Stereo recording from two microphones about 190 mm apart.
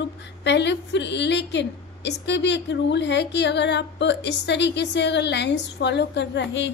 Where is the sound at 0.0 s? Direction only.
65° left (ahead or behind).